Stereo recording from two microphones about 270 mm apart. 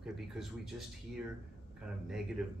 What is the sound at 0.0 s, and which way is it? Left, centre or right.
Speech, centre.